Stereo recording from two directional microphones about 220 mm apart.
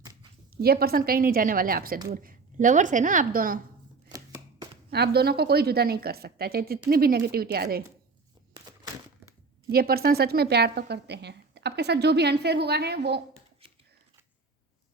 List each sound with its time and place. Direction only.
0.0 s zipper: 20° right (ahead or behind)
0.5 s speech: 45° right (ahead or behind)
4.9 s a woman's voice: 45° right (ahead or behind)
8.5 s crumpling: 20° right (ahead or behind)
9.6 s a woman's voice: 45° right (ahead or behind)